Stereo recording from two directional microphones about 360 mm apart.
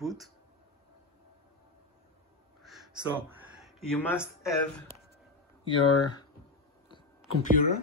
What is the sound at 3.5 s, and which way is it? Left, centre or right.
Speech, centre.